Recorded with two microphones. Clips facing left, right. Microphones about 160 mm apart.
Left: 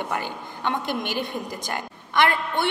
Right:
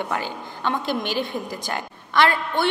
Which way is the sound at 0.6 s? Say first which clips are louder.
Right 2 dB; 20° left (ahead or behind).